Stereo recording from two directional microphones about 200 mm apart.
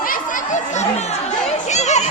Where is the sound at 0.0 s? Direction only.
45° left (ahead or behind).